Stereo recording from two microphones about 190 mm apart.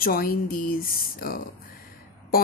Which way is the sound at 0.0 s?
50° left (ahead or behind).